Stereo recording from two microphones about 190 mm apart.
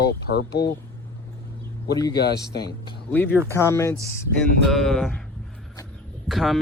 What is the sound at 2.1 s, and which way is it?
Speech, 60° left (ahead or behind).